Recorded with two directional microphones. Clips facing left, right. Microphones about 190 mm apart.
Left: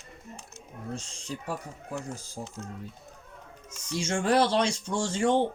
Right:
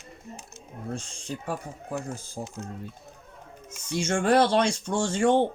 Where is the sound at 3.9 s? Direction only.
55° right (ahead or behind).